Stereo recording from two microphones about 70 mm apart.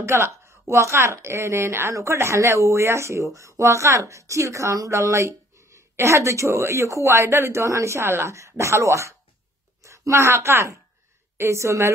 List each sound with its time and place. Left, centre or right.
0.0 s speech: right